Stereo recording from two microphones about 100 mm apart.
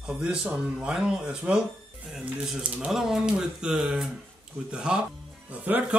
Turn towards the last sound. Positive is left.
turn(degrees=-15)  # may be behind; listen again after turning